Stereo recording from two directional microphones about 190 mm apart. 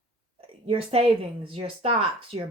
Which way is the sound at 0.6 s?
30° right (ahead or behind).